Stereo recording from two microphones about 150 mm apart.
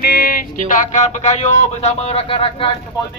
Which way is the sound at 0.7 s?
55° left (ahead or behind).